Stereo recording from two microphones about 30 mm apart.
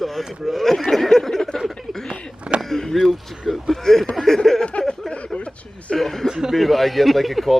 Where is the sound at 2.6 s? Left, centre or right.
Centre.